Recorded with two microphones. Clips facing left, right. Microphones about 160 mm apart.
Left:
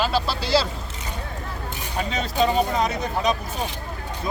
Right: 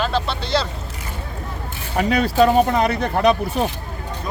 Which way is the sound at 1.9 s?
70° right (ahead or behind).